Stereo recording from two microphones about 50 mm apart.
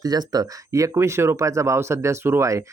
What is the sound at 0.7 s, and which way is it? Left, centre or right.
Speech, right.